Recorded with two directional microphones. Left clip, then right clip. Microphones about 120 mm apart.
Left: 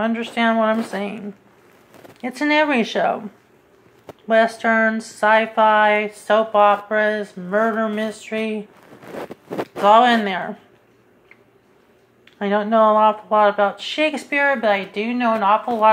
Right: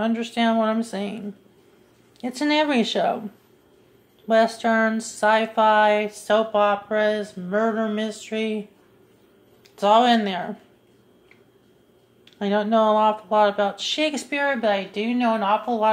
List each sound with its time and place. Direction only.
0.0 s speech: 10° right (ahead or behind)
4.3 s speech: 15° right (ahead or behind)
9.8 s speech: 10° right (ahead or behind)
12.4 s speech: 10° right (ahead or behind)